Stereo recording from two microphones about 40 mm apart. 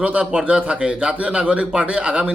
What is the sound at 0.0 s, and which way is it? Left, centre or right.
Speech, right.